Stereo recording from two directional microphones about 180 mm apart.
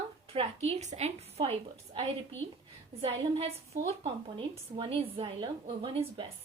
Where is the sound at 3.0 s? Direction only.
35° right (ahead or behind).